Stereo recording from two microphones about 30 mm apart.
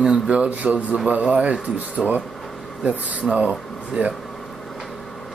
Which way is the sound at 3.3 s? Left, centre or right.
Right.